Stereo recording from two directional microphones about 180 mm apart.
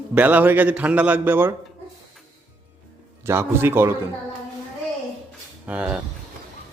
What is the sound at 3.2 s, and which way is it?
Speech, 15° right (ahead or behind).